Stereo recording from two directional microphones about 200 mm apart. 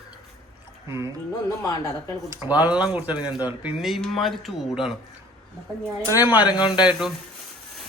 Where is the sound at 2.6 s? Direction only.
5° right (ahead or behind).